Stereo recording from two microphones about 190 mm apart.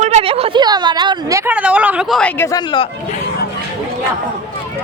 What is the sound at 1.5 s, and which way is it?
Speech, 5° right (ahead or behind).